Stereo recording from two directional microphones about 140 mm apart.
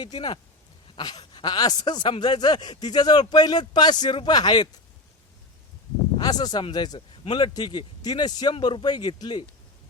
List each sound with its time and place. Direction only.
0.0 s a man's voice: 30° left (ahead or behind)
6.1 s a man's voice: 30° left (ahead or behind)